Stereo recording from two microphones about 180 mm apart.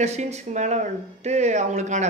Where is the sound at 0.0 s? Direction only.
40° right (ahead or behind).